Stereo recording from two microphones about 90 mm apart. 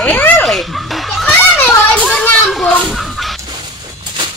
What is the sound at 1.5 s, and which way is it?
Children playing, 15° left (ahead or behind).